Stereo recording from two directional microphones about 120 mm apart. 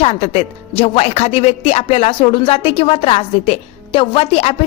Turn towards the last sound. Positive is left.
turn(degrees=55)  # may be behind; listen again after turning